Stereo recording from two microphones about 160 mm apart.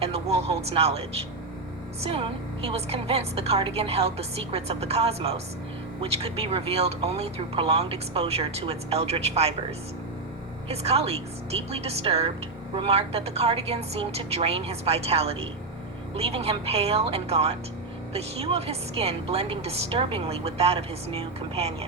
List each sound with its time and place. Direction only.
0.0 s a woman's voice: 40° right (ahead or behind)
10.7 s a woman's voice: 40° right (ahead or behind)